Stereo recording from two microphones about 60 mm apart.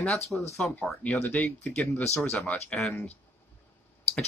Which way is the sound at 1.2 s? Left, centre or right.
Left.